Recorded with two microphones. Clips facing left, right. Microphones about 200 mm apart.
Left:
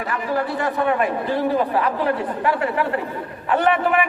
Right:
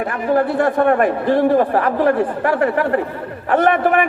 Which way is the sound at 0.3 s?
55° right (ahead or behind).